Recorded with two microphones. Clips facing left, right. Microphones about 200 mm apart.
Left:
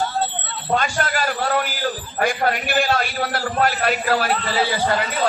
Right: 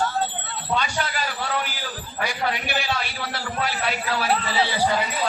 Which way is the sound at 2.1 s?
50° left (ahead or behind).